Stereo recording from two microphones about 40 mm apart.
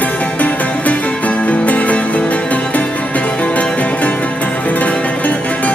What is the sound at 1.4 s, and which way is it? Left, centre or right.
Music, left.